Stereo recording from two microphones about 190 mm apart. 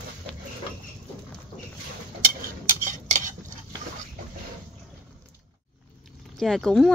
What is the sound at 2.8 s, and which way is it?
Cutlery, 40° right (ahead or behind).